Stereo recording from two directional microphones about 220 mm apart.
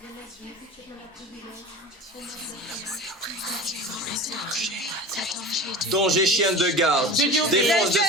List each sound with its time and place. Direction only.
2.9 s speech: centre (ahead or behind)